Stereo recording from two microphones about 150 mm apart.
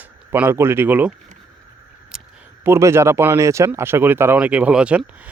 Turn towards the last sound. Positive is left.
turn(degrees=-10)  # may be behind; listen again after turning